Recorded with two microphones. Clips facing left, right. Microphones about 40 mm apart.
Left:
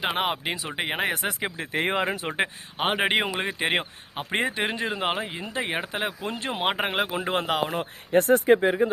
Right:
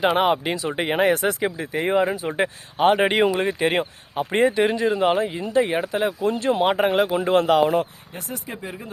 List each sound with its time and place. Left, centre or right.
0.0 s speech: centre
1.7 s speech: left
2.3 s speech: left
7.1 s speech: centre
8.1 s speech: left